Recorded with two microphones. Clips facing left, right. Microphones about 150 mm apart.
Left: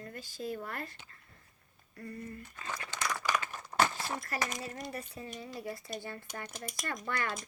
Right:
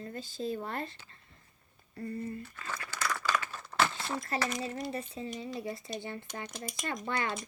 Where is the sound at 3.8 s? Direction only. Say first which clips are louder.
Right 1 dB; 20° left (ahead or behind).